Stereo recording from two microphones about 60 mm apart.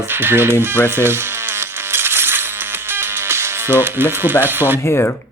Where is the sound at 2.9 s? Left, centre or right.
Right.